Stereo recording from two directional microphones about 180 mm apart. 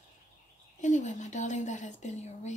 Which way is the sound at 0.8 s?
40° left (ahead or behind).